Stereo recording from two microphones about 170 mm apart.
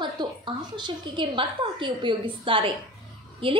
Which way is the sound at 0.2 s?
25° right (ahead or behind).